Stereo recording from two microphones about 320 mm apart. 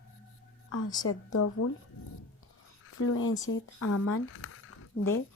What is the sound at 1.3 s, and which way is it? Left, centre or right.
Speech, left.